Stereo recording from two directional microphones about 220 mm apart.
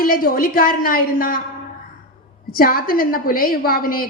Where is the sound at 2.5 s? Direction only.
40° left (ahead or behind).